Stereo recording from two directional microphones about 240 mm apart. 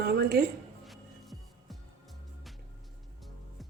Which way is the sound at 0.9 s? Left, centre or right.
Centre.